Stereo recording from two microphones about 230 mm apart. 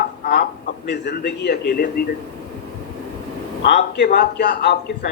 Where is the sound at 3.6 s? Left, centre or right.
Left.